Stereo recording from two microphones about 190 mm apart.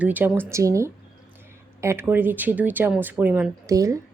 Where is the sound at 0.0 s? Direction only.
10° right (ahead or behind).